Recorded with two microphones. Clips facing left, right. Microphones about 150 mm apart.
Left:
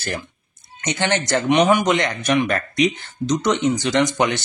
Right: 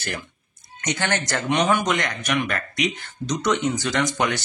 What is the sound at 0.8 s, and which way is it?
Speech, 20° left (ahead or behind).